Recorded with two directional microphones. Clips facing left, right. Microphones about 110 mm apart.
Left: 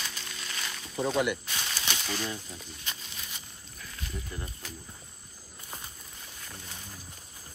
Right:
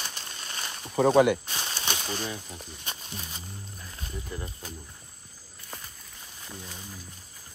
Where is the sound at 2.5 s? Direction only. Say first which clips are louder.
Right 2 dB; 35° right (ahead or behind).